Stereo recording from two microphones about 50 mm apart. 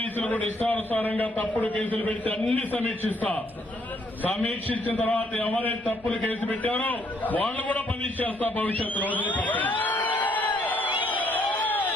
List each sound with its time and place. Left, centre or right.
0.2 s a man's voice: left
11.0 s crowd: left